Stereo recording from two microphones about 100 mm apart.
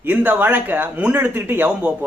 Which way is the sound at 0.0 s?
15° right (ahead or behind).